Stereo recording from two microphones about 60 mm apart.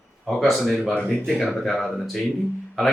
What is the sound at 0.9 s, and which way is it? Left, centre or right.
Speech, left.